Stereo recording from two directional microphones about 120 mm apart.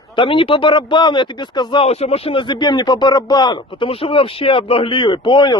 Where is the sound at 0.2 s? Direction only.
45° left (ahead or behind).